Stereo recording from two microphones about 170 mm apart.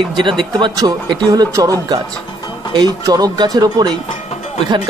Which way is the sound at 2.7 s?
20° right (ahead or behind).